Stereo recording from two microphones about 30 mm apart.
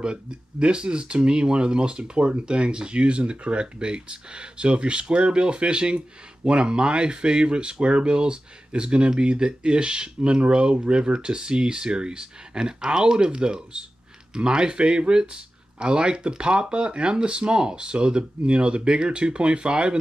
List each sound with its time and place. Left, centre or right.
0.0 s speech: right
11.1 s speech: right